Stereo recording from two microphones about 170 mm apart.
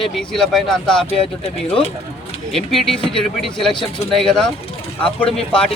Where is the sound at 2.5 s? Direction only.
Centre (ahead or behind).